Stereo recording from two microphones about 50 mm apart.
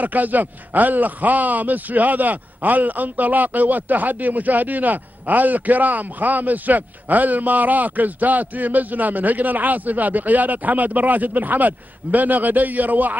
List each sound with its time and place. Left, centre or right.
0.0 s a man's voice: right